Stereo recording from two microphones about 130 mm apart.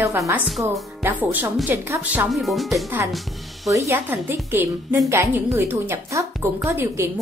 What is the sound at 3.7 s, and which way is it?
A woman's voice, 20° right (ahead or behind).